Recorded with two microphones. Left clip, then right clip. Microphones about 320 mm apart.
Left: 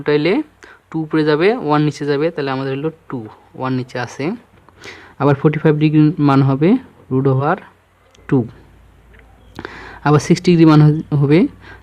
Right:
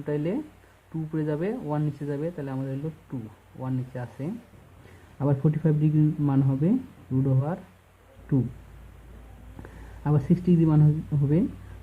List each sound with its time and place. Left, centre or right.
0.0 s speech: left
10.0 s speech: left